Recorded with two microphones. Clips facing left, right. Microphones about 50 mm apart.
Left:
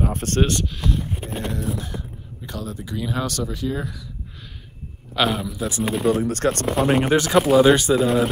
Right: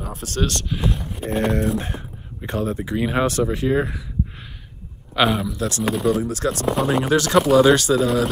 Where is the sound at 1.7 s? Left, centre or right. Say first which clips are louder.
Right 4 dB; right.